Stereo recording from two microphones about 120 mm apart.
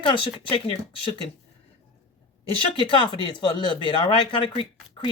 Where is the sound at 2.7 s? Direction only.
45° left (ahead or behind).